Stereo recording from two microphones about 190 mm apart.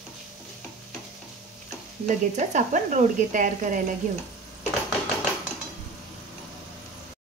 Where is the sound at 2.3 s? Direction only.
40° right (ahead or behind).